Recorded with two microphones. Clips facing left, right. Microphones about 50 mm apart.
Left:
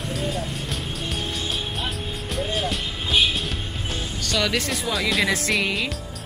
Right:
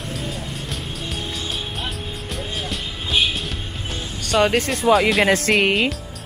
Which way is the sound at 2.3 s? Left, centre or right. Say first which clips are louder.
Left 4 dB; centre.